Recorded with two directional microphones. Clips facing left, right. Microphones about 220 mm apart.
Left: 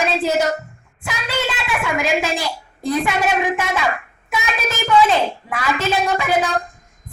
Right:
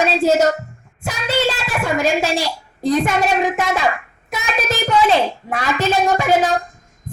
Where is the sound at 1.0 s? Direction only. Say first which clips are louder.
Right 4 dB; 40° right (ahead or behind).